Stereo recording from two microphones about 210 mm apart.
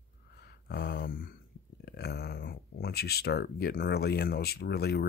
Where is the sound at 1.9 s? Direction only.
50° left (ahead or behind).